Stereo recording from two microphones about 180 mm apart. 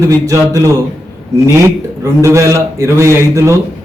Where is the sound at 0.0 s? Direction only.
15° right (ahead or behind).